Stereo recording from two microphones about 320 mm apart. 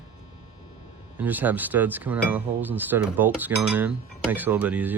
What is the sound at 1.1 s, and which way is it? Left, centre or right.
Speech, centre.